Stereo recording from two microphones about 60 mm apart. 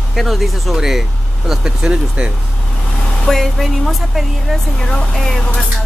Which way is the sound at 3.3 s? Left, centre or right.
Centre.